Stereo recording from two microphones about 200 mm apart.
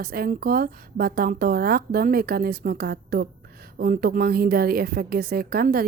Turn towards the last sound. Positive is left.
turn(degrees=-50)  # may be behind; listen again after turning